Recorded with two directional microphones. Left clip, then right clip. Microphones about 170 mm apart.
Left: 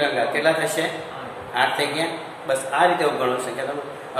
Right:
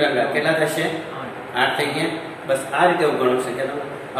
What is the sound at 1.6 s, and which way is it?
A man's voice, 70° left (ahead or behind).